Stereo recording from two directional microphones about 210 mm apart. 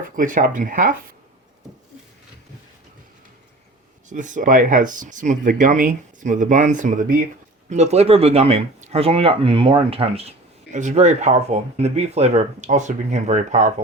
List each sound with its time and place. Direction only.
0.2 s speech: 40° right (ahead or behind)
4.1 s speech: 35° right (ahead or behind)